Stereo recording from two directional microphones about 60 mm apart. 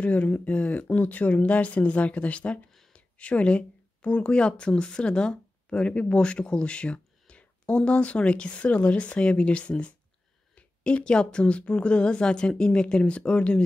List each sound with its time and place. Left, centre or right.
0.0 s a woman's voice: left